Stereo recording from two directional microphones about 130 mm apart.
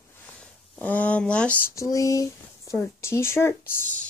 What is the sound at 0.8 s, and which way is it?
Speech, 10° left (ahead or behind).